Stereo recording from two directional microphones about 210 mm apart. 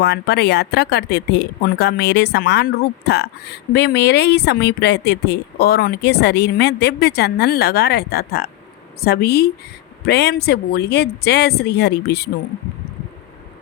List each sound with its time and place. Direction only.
0.0 s speech: 50° left (ahead or behind)